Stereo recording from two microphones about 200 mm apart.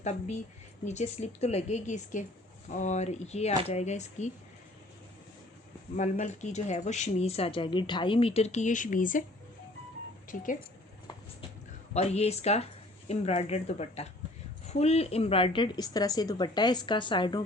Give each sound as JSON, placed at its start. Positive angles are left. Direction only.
{"t": 0.0, "sound": "speech", "side_deg": 35}
{"t": 6.0, "sound": "speech", "side_deg": 35}
{"t": 10.2, "sound": "speech", "side_deg": 40}
{"t": 11.9, "sound": "a woman's voice", "side_deg": 30}